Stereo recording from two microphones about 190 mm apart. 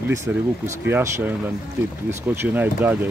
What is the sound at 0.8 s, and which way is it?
Speech, 10° right (ahead or behind).